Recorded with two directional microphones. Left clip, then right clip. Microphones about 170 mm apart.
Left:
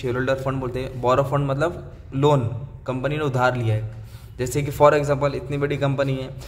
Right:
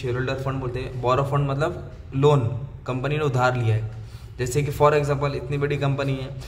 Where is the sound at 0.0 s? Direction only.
40° left (ahead or behind).